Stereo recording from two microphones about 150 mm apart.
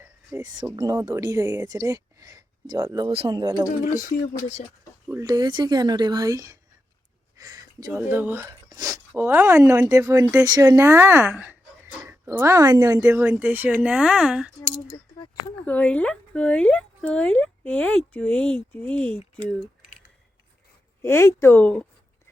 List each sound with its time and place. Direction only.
0.0 s a sound: 15° right (ahead or behind)
0.4 s speech: 30° right (ahead or behind)
3.1 s speech: 40° right (ahead or behind)
3.9 s speech: 55° left (ahead or behind)
5.2 s speech: 25° right (ahead or behind); by 14.5 s 5° right (ahead or behind)
15.6 s speech: 10° left (ahead or behind)
21.0 s speech: 15° left (ahead or behind)